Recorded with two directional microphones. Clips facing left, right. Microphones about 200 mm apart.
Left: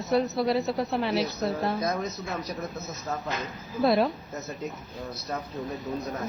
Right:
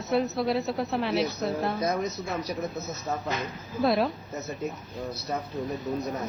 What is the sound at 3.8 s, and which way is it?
Speech, centre (ahead or behind).